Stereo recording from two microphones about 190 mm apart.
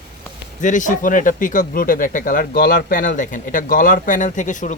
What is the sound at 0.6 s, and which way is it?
Speech, 40° left (ahead or behind).